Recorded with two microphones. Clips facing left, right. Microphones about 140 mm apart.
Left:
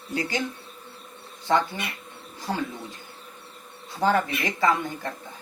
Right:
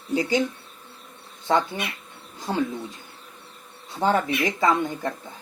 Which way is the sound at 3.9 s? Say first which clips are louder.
Right 1 dB; 20° right (ahead or behind).